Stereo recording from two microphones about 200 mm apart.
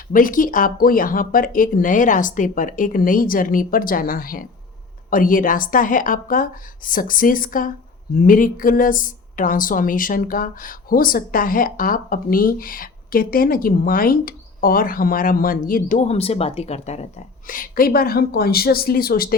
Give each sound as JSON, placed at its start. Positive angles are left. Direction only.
{"t": 0.1, "sound": "a woman's voice", "side_deg": 45}